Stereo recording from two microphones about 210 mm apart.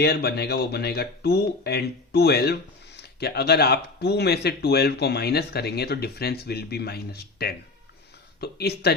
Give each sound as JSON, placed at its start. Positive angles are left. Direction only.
{"t": 0.0, "sound": "speech", "side_deg": 50}